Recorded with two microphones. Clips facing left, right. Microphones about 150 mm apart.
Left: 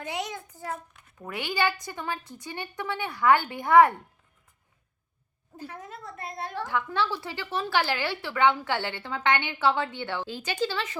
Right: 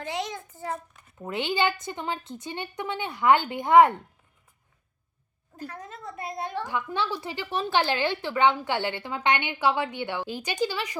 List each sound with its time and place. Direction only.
0.0 s a sound: 10° left (ahead or behind)
0.3 s a child's voice: 5° right (ahead or behind)
1.2 s a woman's voice: 25° right (ahead or behind)
5.7 s a woman's voice: centre (ahead or behind)
6.7 s a woman's voice: 15° right (ahead or behind)